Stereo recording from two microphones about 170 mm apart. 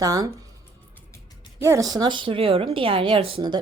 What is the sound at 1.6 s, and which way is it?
A woman's voice, 20° right (ahead or behind).